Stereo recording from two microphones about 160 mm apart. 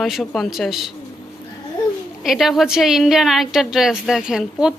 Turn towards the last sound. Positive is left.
turn(degrees=-5)  # may be behind; listen again after turning